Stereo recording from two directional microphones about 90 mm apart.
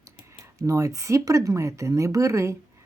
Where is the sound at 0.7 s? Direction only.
35° right (ahead or behind).